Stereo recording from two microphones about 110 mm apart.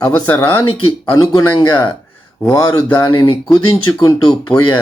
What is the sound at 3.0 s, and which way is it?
Speech, 50° left (ahead or behind).